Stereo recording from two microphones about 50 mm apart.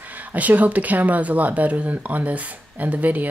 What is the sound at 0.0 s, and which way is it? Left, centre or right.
Speech, right.